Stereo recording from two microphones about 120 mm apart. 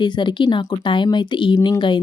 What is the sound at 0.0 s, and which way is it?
Speech, 40° left (ahead or behind).